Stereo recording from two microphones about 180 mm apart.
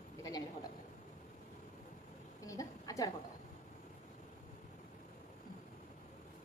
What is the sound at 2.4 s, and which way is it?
Speech, 20° left (ahead or behind).